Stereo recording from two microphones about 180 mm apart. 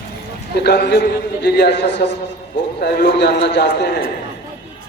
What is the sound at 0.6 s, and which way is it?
A man's voice, 65° left (ahead or behind).